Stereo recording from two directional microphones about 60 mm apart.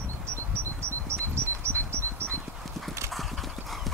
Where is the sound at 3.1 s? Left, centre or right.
Centre.